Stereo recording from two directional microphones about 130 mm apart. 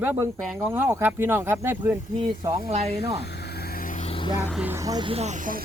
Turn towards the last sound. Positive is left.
turn(degrees=-50)  # may be behind; listen again after turning